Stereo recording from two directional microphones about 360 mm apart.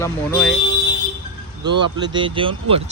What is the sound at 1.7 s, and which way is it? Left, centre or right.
Speech, right.